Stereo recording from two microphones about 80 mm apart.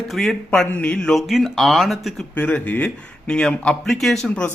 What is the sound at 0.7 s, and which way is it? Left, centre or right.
Speech, centre.